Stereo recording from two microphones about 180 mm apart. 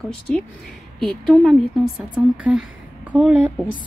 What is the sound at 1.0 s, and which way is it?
A woman's voice, centre (ahead or behind).